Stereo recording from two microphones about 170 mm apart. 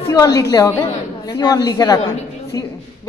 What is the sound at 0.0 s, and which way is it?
A woman's voice, 20° left (ahead or behind).